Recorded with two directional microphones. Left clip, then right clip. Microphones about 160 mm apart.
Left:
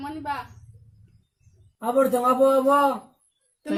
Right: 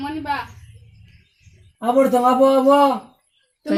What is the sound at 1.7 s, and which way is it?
A man's voice, 15° left (ahead or behind).